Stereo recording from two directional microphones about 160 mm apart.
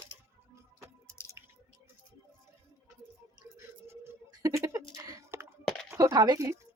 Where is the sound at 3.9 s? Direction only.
20° right (ahead or behind).